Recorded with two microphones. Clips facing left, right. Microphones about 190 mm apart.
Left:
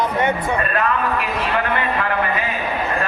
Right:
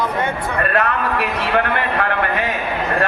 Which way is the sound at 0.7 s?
70° right (ahead or behind).